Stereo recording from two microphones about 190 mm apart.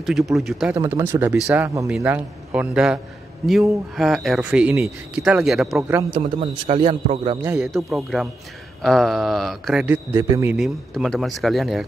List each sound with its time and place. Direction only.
0.0 s speech: centre (ahead or behind)
0.7 s speech: 15° right (ahead or behind)
5.8 s speech: 15° right (ahead or behind)
6.6 s a man's voice: 30° right (ahead or behind)
7.4 s speech: 5° right (ahead or behind)
9.8 s speech: 15° right (ahead or behind)
10.5 s speech: centre (ahead or behind)